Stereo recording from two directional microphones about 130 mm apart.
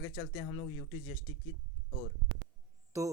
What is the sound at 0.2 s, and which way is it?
Speech, 35° left (ahead or behind).